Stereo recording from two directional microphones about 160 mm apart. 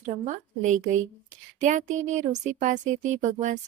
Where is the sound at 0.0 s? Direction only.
50° right (ahead or behind).